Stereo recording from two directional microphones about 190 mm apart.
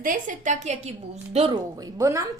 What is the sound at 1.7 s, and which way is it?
Speech, 20° right (ahead or behind).